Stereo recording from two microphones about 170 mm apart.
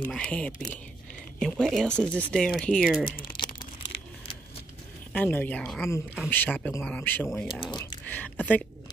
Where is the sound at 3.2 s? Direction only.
25° left (ahead or behind).